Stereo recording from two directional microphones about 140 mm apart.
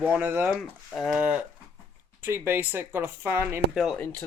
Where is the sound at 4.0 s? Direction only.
15° left (ahead or behind).